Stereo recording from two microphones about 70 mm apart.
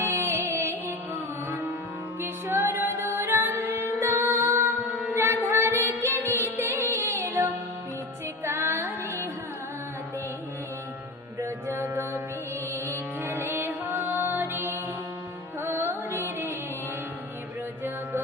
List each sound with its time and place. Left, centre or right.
0.0 s music: right
2.2 s music: right
4.0 s music: right
4.3 s music: right
8.4 s music: right
11.3 s music: right